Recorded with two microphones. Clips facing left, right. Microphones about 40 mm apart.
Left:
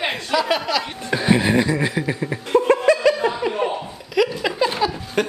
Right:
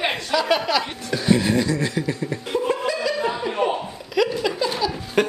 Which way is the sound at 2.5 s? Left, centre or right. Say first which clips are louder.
Left 8 dB; left.